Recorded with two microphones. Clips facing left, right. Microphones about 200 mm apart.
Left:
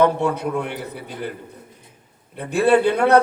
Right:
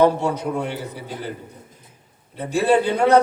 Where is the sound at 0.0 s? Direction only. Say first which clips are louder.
Even; 60° left (ahead or behind).